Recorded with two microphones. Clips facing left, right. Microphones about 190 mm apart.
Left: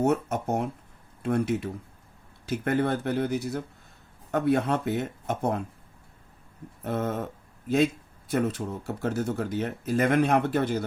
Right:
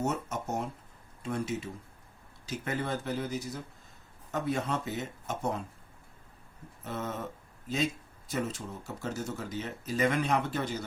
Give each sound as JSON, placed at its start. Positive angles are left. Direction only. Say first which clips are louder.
{"t": 0.0, "sound": "speech", "louder": "left 8 dB", "side_deg": 60}
{"t": 6.8, "sound": "speech", "louder": "left 7 dB", "side_deg": 55}
{"t": 8.3, "sound": "speech", "louder": "left 7 dB", "side_deg": 60}